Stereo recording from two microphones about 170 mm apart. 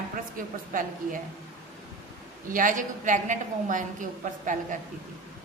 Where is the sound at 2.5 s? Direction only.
50° right (ahead or behind).